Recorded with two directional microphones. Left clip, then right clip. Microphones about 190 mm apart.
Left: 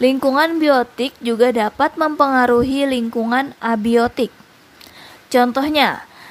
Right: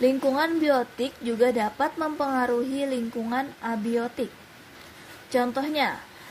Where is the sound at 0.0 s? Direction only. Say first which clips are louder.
Left 8 dB; 25° left (ahead or behind).